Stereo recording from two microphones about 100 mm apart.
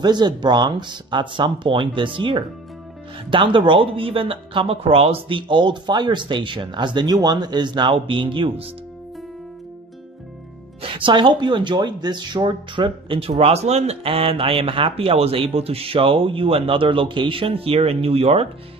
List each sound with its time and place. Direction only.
0.0 s speech: 45° right (ahead or behind)
10.8 s speech: 55° right (ahead or behind); by 18.5 s 75° right (ahead or behind)